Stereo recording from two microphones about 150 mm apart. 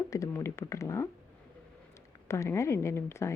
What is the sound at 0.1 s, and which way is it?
Speech, 20° left (ahead or behind).